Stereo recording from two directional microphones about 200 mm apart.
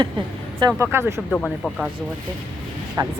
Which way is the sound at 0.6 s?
10° right (ahead or behind).